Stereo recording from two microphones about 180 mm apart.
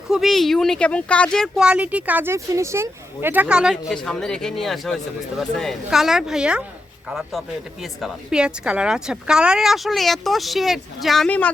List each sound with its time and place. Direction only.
0.1 s speech: centre (ahead or behind)